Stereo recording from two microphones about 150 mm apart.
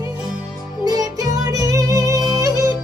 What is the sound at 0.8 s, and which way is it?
Music, 25° right (ahead or behind).